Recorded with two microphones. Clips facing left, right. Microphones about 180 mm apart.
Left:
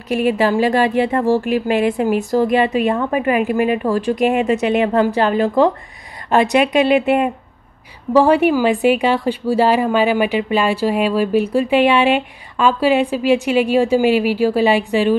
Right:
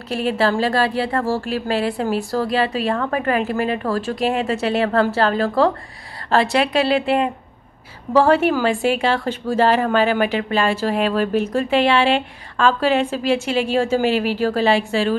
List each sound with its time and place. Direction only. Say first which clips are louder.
0.1 s a woman's voice: left 4 dB; 15° left (ahead or behind)